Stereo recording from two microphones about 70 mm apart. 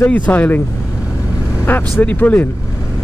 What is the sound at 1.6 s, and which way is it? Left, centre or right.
Speech, left.